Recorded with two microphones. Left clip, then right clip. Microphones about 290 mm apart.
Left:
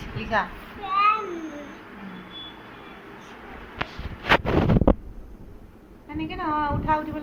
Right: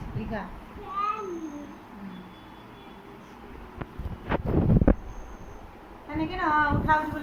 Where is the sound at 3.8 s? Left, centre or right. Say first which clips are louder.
Left 11 dB; left.